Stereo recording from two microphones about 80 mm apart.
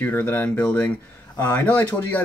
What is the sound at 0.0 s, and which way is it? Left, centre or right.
Speech, left.